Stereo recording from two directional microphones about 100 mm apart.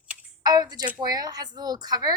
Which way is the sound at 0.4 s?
40° right (ahead or behind).